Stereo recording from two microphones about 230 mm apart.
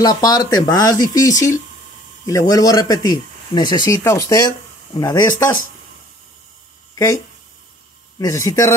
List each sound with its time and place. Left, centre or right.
0.0 s speech: centre
8.2 s speech: centre